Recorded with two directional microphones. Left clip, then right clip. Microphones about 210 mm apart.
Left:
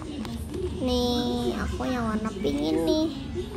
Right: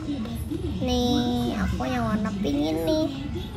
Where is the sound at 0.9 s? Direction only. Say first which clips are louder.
Right 2 dB; 25° left (ahead or behind).